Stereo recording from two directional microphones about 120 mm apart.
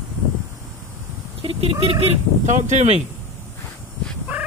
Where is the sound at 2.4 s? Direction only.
90° right; by 3.0 s 75° right (ahead or behind).